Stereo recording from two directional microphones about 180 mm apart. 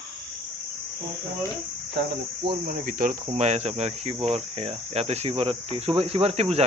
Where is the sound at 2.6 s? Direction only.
50° right (ahead or behind).